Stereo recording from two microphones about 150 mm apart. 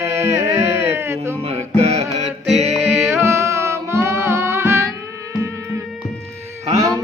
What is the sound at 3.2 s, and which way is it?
Music, 15° right (ahead or behind).